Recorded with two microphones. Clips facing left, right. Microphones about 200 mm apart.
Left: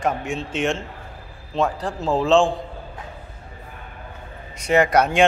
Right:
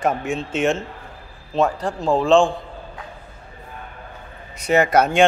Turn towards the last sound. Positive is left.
turn(degrees=0)  # may be behind; listen again after turning